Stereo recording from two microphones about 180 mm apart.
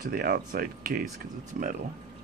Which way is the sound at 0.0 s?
55° right (ahead or behind).